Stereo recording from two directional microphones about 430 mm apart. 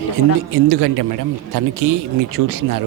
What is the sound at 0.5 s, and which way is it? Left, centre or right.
Speech, right.